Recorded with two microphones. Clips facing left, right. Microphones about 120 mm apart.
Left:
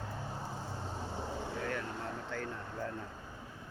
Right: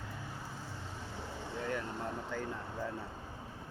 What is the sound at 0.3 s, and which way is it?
Vehicle, 30° left (ahead or behind).